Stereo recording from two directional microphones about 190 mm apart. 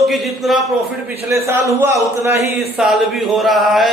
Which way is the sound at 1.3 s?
15° right (ahead or behind).